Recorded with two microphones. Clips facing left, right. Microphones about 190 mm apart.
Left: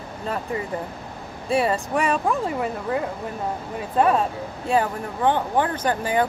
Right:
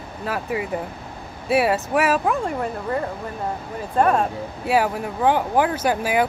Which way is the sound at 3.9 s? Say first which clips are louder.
Right 1 dB; centre (ahead or behind).